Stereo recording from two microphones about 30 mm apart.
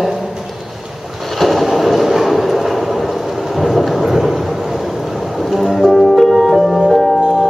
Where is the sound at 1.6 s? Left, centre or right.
Centre.